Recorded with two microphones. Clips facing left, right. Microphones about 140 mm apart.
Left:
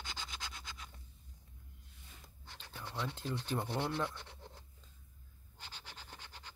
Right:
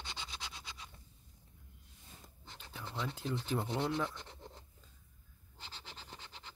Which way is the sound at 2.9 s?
10° right (ahead or behind).